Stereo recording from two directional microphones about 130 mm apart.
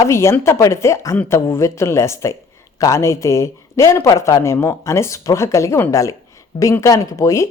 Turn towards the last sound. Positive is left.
turn(degrees=25)  # may be behind; listen again after turning